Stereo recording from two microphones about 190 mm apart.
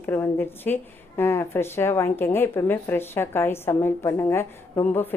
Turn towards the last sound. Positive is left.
turn(degrees=10)  # may be behind; listen again after turning